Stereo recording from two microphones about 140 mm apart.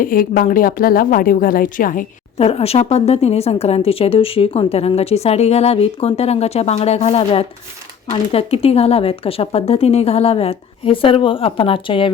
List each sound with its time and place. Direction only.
0.0 s speech: 90° left
2.4 s a woman's voice: 45° left (ahead or behind)